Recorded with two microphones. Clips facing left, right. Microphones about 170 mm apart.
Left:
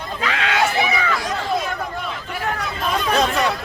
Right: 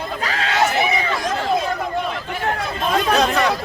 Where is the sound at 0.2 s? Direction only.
35° right (ahead or behind).